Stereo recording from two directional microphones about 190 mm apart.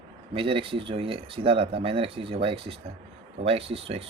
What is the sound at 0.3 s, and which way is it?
Speech, 30° right (ahead or behind).